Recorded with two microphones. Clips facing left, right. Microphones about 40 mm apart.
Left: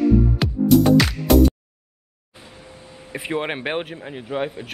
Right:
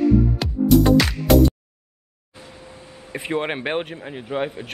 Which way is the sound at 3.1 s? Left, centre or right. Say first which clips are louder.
Right 1 dB; centre.